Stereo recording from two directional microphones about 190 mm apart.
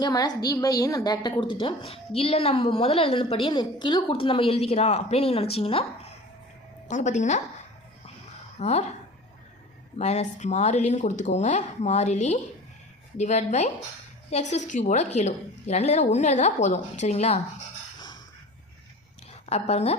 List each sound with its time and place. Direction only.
0.0 s a woman's voice: 20° left (ahead or behind); by 7.4 s 40° left (ahead or behind)
8.5 s a woman's voice: 35° left (ahead or behind)
10.0 s a woman's voice: 35° left (ahead or behind)
19.5 s a woman's voice: 35° left (ahead or behind)